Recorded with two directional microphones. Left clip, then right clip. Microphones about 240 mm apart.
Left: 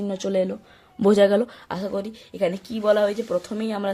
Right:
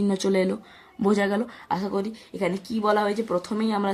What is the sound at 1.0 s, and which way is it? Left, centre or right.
Speech, left.